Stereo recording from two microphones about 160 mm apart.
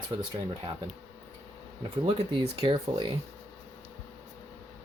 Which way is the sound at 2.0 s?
30° right (ahead or behind).